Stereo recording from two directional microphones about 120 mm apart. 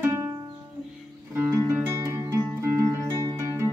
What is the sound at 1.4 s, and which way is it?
Music, 20° right (ahead or behind).